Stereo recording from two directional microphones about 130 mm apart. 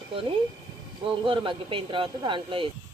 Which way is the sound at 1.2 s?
40° right (ahead or behind).